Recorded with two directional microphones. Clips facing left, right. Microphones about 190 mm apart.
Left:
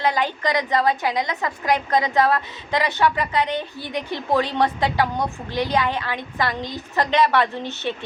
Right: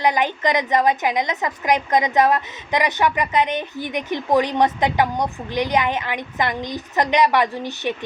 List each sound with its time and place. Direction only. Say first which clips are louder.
0.0 s a woman's voice: right 2 dB; 20° right (ahead or behind)